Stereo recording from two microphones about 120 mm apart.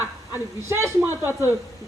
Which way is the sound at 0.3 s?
20° right (ahead or behind).